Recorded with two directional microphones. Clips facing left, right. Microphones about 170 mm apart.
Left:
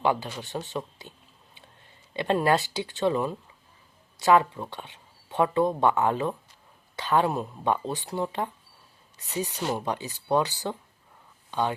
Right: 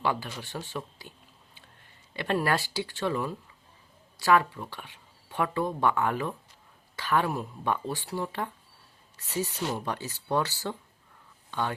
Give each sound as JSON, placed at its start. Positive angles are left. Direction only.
{"t": 0.0, "sound": "speech", "side_deg": 20}
{"t": 2.1, "sound": "speech", "side_deg": 20}